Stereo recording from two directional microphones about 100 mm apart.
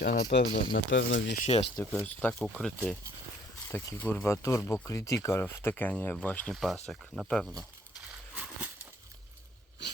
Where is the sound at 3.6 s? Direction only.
25° left (ahead or behind).